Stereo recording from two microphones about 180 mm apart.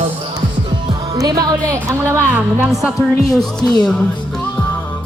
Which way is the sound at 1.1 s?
20° right (ahead or behind).